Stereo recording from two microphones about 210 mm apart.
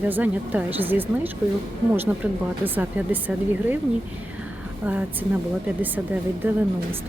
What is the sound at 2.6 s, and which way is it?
Speech, 10° right (ahead or behind).